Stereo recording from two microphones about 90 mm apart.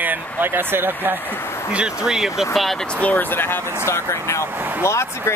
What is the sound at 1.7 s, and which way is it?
Speech, 10° right (ahead or behind).